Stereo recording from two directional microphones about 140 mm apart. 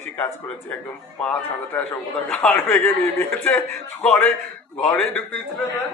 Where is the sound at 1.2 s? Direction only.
10° left (ahead or behind).